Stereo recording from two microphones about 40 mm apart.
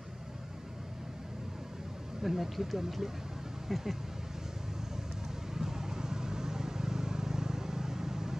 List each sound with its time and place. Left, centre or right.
2.2 s speech: centre
5.5 s vehicle: centre